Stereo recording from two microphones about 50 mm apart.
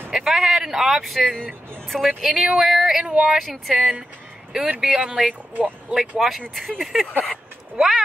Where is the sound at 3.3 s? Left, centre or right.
Centre.